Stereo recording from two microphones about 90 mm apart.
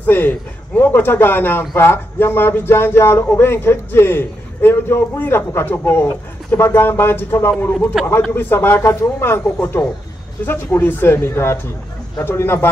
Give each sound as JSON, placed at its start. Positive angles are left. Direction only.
{"t": 0.0, "sound": "a man's voice", "side_deg": 20}
{"t": 8.0, "sound": "speech", "side_deg": -5}
{"t": 8.4, "sound": "speech", "side_deg": 25}